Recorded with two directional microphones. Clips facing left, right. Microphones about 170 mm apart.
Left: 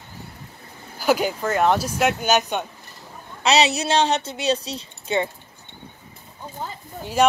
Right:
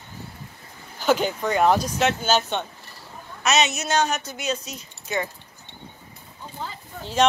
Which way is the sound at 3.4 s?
35° left (ahead or behind).